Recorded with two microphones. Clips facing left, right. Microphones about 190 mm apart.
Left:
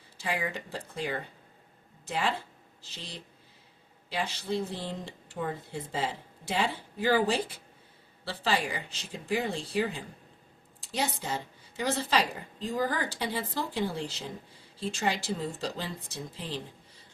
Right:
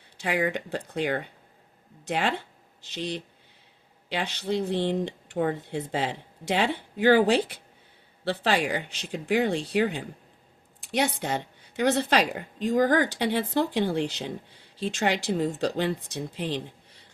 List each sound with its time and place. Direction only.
0.2 s a woman's voice: 65° right (ahead or behind)